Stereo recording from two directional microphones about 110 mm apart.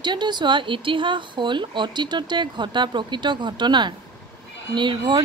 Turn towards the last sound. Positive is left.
turn(degrees=-45)  # may be behind; listen again after turning